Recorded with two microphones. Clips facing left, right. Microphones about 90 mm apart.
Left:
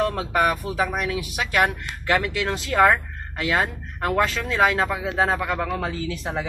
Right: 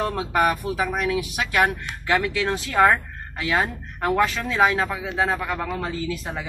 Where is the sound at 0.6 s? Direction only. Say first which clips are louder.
Right 2 dB; 25° right (ahead or behind).